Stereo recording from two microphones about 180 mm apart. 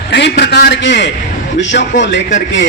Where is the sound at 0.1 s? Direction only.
70° left (ahead or behind).